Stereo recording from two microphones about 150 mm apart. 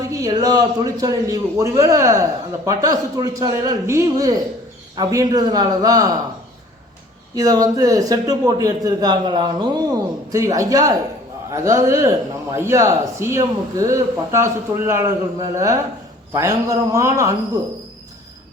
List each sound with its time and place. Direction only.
0.1 s a man's voice: 25° right (ahead or behind)
7.3 s a man's voice: 25° right (ahead or behind)